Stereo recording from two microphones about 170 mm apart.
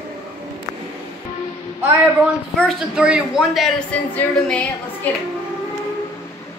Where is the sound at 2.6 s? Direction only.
Centre (ahead or behind).